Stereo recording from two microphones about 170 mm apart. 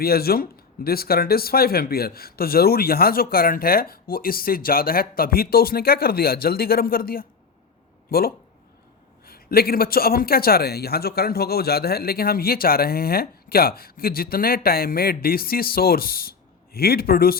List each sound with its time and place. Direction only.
0.0 s speech: 65° left (ahead or behind)